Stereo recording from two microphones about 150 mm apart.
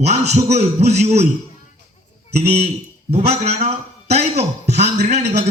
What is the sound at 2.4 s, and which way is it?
A man's voice, 45° right (ahead or behind).